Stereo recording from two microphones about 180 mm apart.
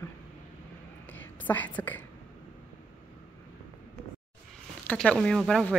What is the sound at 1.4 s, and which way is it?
Speech, 10° left (ahead or behind).